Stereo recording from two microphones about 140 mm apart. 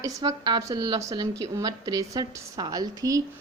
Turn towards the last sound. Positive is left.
turn(degrees=-25)  # may be behind; listen again after turning